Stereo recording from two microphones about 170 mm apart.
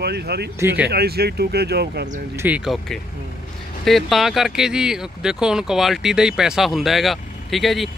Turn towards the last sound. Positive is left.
turn(degrees=0)  # may be behind; listen again after turning